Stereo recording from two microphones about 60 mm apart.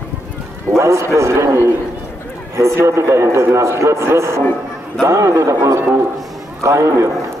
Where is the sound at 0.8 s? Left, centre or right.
Right.